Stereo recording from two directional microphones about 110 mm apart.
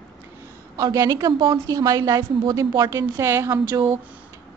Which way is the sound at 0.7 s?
35° right (ahead or behind).